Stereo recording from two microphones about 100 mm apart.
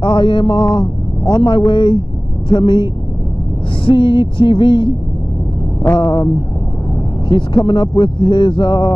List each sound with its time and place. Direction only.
0.0 s a man's voice: 55° left (ahead or behind)
7.2 s speech: 55° left (ahead or behind)